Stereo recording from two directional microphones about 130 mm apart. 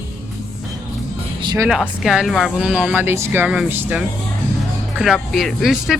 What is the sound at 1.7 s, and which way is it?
Speech, 5° right (ahead or behind).